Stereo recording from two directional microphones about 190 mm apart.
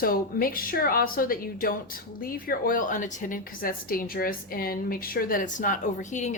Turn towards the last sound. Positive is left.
turn(degrees=40)  # may be behind; listen again after turning